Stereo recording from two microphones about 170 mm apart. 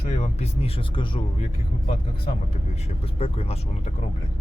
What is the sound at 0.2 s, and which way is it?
Speech, 40° left (ahead or behind).